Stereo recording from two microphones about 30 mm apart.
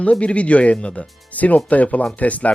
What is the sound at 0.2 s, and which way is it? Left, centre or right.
Speech, left.